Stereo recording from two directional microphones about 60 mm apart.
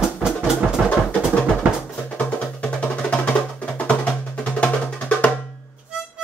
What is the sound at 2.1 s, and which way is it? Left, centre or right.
Music, left.